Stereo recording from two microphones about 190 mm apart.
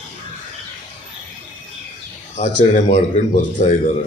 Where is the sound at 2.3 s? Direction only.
40° left (ahead or behind).